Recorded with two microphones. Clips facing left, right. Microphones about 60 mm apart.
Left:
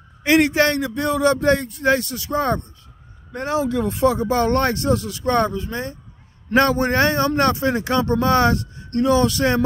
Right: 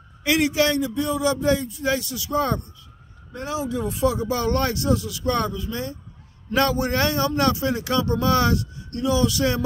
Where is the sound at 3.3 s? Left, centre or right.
Left.